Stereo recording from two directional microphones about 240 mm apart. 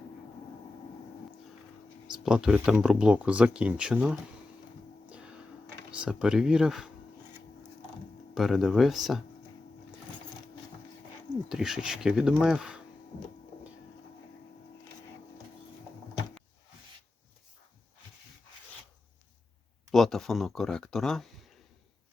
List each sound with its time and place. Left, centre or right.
2.1 s speech: centre
5.0 s music: centre
5.9 s speech: centre
8.4 s speech: centre
11.4 s speech: centre
19.9 s speech: centre